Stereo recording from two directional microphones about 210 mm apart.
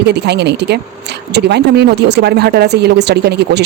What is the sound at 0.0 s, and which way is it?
Speech, 55° right (ahead or behind).